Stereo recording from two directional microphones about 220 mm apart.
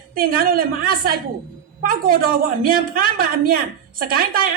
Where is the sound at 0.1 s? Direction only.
40° right (ahead or behind).